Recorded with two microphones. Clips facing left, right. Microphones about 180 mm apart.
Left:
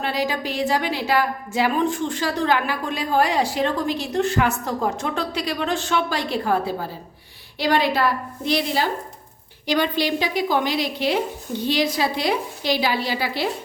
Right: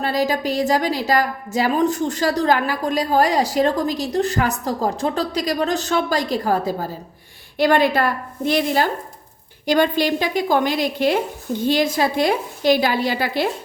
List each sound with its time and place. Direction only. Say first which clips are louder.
0.0 s a woman's voice: right 4 dB; 40° right (ahead or behind)
7.6 s a woman's voice: right 3 dB; 50° right (ahead or behind)